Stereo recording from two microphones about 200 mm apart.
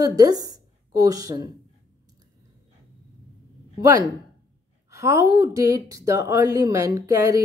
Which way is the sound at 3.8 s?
15° right (ahead or behind).